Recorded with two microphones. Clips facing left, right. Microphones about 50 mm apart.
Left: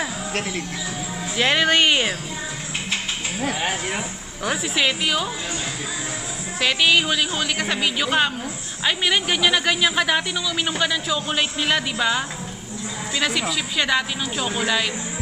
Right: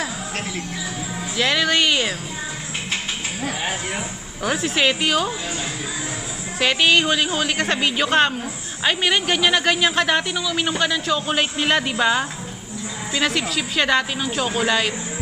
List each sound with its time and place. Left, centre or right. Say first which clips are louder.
1.3 s speech: left 1 dB; left
4.5 s speech: right 2 dB; centre
6.6 s speech: right 1 dB; centre